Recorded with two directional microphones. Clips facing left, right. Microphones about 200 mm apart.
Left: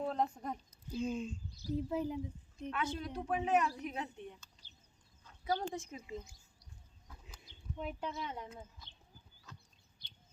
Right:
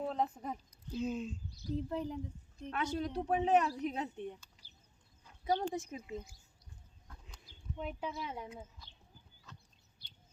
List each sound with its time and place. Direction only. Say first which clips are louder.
0.0 s speech: even; centre (ahead or behind)
2.6 s speech: right 2 dB; 40° right (ahead or behind)
5.2 s speech: right 3 dB; 20° right (ahead or behind)
6.1 s speech: right 2 dB; 5° right (ahead or behind)
7.1 s chicken: even; 5° left (ahead or behind)
7.4 s speech: even; centre (ahead or behind)
9.5 s bird: left 1 dB; centre (ahead or behind)